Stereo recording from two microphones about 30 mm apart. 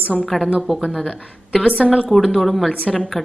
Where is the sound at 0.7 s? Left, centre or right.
Centre.